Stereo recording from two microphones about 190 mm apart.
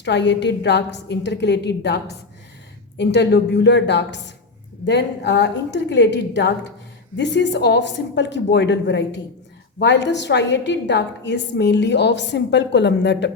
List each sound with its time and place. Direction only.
0.0 s a woman's voice: 65° left (ahead or behind)
3.0 s a woman's voice: 65° left (ahead or behind)